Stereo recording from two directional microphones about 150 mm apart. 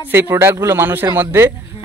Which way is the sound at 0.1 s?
15° right (ahead or behind).